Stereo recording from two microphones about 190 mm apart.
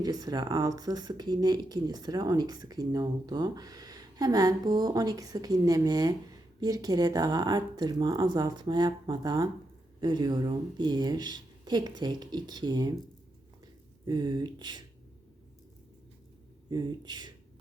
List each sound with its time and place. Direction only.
0.0 s speech: 20° right (ahead or behind)
14.0 s speech: 25° right (ahead or behind)
16.6 s speech: 20° right (ahead or behind)